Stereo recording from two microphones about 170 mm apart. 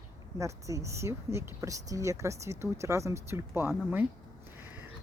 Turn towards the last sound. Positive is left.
turn(degrees=-10)  # may be behind; listen again after turning